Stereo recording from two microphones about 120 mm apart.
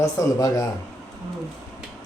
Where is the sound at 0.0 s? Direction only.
30° left (ahead or behind).